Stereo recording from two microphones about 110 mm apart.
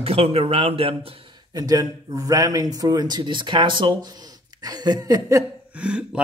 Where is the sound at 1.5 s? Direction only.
35° right (ahead or behind).